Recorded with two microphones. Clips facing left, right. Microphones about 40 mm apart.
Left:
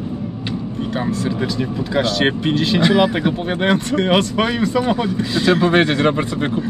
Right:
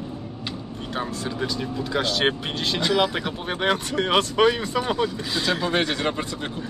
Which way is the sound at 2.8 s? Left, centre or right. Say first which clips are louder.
Left 6 dB; centre.